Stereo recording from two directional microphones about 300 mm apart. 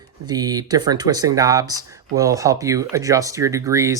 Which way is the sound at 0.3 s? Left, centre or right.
Centre.